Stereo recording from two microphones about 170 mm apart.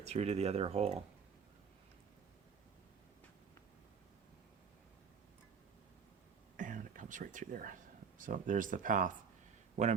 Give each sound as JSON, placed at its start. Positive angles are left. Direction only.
{"t": 0.0, "sound": "speech", "side_deg": -40}
{"t": 6.6, "sound": "a sound", "side_deg": -50}
{"t": 8.2, "sound": "speech", "side_deg": -50}